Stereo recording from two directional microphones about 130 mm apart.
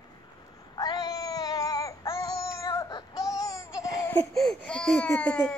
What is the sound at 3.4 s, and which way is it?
Babbling, 25° left (ahead or behind).